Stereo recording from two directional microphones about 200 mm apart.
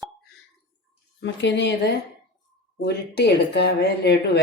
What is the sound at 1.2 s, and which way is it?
Speech, 65° left (ahead or behind).